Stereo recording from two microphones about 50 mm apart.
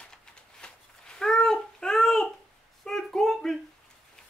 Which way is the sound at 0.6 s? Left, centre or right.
Centre.